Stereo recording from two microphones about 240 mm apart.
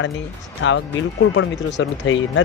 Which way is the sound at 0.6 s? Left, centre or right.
Left.